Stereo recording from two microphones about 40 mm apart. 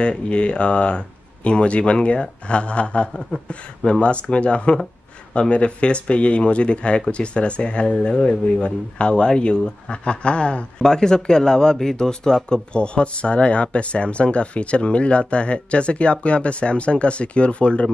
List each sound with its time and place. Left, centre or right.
0.0 s speech: left
10.8 s speech: centre
12.7 s speech: left